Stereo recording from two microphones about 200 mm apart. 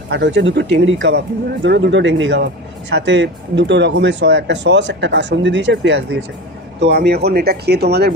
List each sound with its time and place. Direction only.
0.1 s speech: 60° right (ahead or behind)